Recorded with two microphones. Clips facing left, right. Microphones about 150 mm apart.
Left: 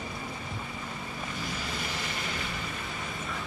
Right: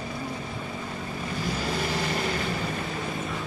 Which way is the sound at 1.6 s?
35° right (ahead or behind).